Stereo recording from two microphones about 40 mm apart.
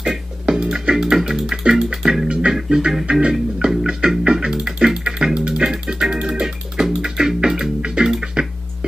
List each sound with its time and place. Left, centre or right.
0.0 s music: centre
2.5 s music: centre